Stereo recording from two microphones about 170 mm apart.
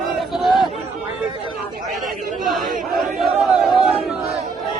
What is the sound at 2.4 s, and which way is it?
Chatter, centre (ahead or behind).